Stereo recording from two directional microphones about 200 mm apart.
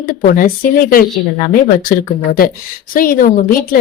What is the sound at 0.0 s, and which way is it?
A woman's voice, 45° left (ahead or behind).